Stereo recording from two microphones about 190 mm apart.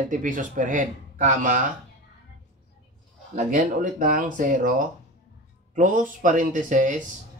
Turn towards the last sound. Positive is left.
turn(degrees=-40)  # may be behind; listen again after turning